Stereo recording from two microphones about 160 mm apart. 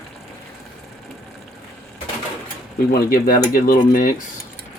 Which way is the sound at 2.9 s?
65° left (ahead or behind).